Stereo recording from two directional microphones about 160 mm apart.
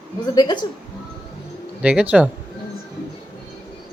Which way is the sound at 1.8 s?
10° right (ahead or behind).